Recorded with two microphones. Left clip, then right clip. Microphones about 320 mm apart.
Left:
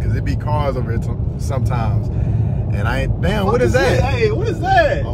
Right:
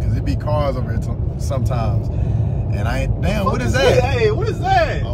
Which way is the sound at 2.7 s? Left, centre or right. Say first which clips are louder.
Left 3 dB; centre.